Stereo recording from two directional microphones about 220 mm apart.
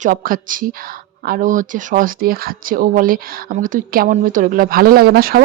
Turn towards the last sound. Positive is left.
turn(degrees=-40)  # may be behind; listen again after turning